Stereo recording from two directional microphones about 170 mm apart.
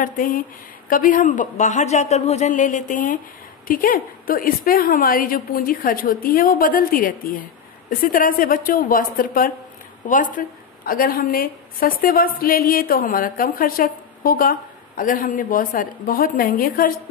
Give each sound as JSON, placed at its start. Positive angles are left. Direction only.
{"t": 0.0, "sound": "a woman's voice", "side_deg": 55}